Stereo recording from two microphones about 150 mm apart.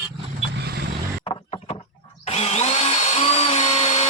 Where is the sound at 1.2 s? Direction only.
35° left (ahead or behind).